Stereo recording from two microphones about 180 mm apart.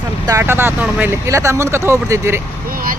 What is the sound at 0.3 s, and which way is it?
Speech, 15° right (ahead or behind).